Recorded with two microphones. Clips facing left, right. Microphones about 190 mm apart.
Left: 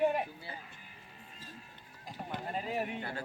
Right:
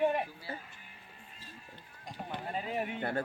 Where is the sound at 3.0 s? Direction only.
55° right (ahead or behind).